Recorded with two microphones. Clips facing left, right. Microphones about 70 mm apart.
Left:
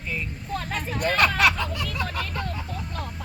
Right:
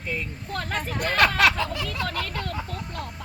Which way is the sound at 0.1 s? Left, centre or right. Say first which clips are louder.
Left 1 dB; right.